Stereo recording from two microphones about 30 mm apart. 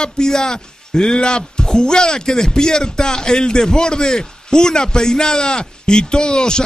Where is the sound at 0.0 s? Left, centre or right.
Left.